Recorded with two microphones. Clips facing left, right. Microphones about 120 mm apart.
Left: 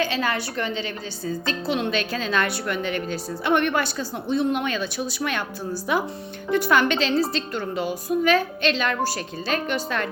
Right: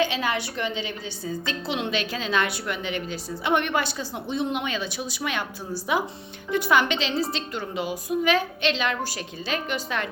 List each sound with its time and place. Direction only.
0.0 s a woman's voice: 15° right (ahead or behind)